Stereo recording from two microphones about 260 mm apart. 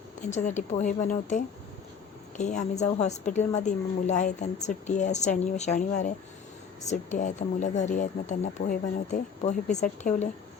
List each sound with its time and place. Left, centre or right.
0.2 s a woman's voice: left
7.2 s a woman's voice: left